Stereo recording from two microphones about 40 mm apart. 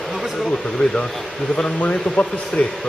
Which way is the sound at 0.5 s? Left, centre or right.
Centre.